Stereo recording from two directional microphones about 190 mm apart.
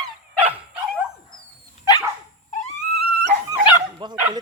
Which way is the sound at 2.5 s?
35° left (ahead or behind).